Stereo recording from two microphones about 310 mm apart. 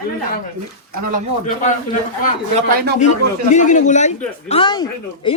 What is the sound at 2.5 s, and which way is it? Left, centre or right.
Speech, right.